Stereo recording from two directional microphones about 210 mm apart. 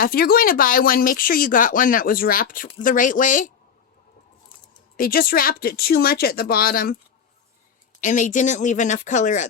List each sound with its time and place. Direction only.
0.0 s speech: 45° left (ahead or behind)
4.9 s speech: 45° left (ahead or behind)
8.0 s speech: 35° left (ahead or behind)